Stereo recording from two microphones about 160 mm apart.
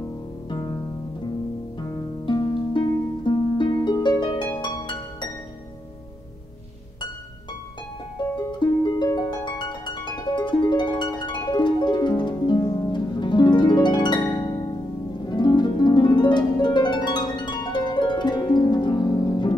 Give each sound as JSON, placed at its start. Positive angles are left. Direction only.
{"t": 0.5, "sound": "music", "side_deg": 30}
{"t": 2.2, "sound": "harp", "side_deg": 30}
{"t": 8.5, "sound": "harp", "side_deg": 30}